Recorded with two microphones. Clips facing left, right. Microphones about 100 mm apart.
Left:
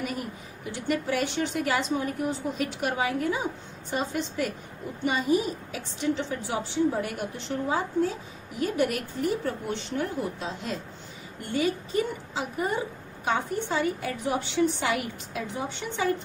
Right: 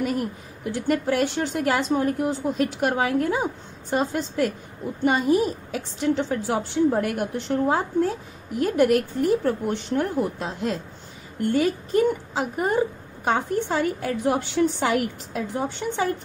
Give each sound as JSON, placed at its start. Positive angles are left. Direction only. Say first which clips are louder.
{"t": 0.8, "sound": "a woman's voice", "louder": "right 5 dB", "side_deg": -45}